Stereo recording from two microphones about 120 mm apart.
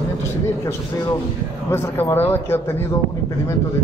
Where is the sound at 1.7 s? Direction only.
20° left (ahead or behind).